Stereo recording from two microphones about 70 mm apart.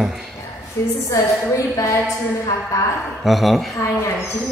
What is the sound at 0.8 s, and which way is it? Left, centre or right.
A woman's voice, left.